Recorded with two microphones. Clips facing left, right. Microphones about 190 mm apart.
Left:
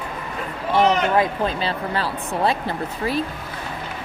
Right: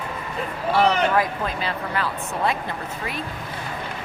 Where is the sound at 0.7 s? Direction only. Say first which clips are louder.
Left 2 dB; 25° left (ahead or behind).